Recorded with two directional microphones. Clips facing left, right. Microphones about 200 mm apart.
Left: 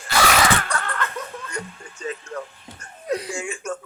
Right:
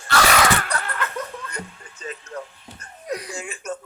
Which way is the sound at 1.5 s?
35° right (ahead or behind).